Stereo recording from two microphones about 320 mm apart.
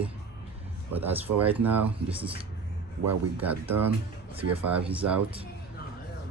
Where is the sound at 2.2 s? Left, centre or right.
Centre.